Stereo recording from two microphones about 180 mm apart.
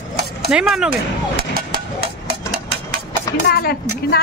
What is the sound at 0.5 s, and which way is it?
Speech, 5° right (ahead or behind).